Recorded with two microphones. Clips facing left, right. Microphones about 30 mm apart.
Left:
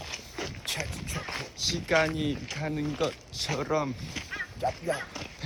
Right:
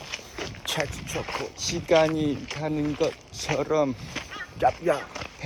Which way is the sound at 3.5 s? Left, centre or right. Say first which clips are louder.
Right 5 dB; centre.